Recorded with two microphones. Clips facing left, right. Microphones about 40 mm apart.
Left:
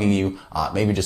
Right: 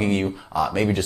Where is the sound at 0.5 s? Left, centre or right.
Right.